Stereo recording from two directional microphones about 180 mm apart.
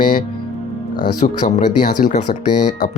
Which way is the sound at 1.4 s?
45° left (ahead or behind).